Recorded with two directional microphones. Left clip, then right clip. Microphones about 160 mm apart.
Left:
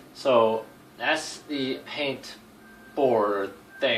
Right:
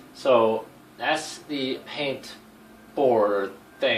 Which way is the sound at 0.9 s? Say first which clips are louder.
Even; 10° right (ahead or behind).